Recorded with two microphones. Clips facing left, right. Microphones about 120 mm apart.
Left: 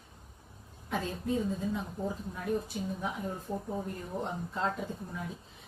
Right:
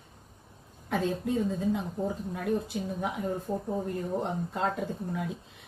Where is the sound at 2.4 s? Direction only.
60° right (ahead or behind).